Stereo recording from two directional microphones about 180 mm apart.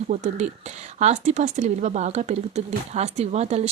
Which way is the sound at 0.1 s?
40° right (ahead or behind).